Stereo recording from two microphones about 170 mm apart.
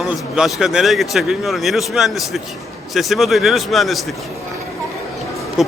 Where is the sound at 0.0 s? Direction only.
5° right (ahead or behind).